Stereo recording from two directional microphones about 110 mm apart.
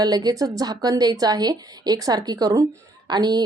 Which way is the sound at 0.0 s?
40° right (ahead or behind).